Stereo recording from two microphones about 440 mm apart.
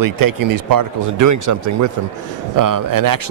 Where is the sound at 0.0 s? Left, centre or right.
Right.